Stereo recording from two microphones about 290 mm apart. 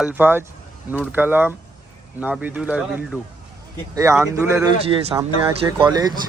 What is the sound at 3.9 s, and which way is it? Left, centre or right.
Speech, centre.